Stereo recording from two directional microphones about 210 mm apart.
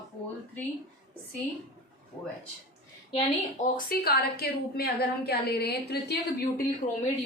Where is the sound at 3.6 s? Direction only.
40° left (ahead or behind).